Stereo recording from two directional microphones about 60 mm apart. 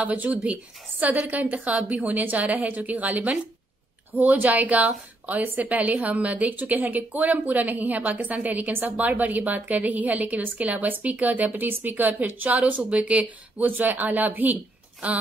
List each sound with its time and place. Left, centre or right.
0.0 s a woman's voice: right